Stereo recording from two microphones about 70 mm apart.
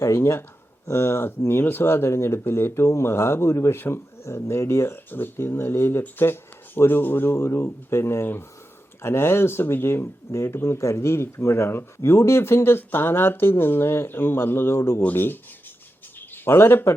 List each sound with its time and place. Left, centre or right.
0.0 s speech: left